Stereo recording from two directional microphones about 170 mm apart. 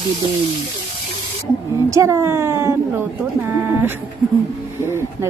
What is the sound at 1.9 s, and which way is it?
A woman's voice, 15° right (ahead or behind).